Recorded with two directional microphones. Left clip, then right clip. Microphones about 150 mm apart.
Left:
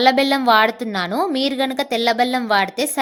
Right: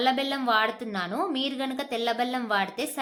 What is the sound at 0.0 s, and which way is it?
A woman's voice, 45° left (ahead or behind).